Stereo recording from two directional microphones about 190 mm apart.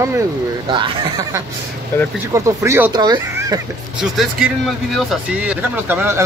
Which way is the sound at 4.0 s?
Centre (ahead or behind).